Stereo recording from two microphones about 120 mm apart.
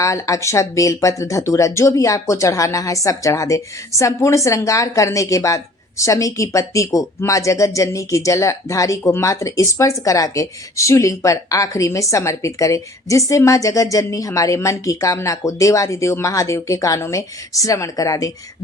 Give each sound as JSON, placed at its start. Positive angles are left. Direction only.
{"t": 0.0, "sound": "speech", "side_deg": 25}